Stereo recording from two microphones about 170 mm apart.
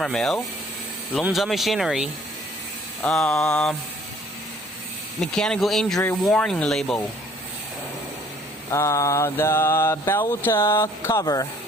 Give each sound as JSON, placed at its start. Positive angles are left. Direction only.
{"t": 0.0, "sound": "speech", "side_deg": 0}
{"t": 5.2, "sound": "speech", "side_deg": 5}
{"t": 8.7, "sound": "mantra", "side_deg": 20}